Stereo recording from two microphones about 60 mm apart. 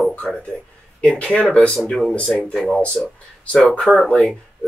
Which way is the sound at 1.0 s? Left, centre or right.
Centre.